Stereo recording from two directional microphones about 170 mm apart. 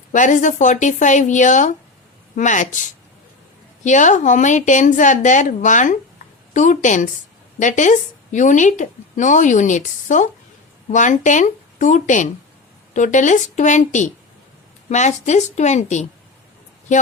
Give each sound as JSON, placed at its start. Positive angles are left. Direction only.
{"t": 0.1, "sound": "a woman's voice", "side_deg": 50}
{"t": 3.8, "sound": "a woman's voice", "side_deg": 45}